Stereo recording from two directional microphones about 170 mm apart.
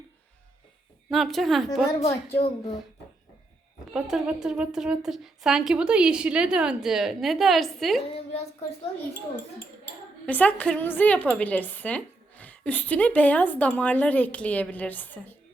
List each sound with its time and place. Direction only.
1.1 s a woman's voice: centre (ahead or behind)
2.0 s a woman's voice: 35° left (ahead or behind)
3.9 s a woman's voice: 5° right (ahead or behind)
8.1 s a woman's voice: 35° left (ahead or behind)
10.2 s a woman's voice: 10° left (ahead or behind)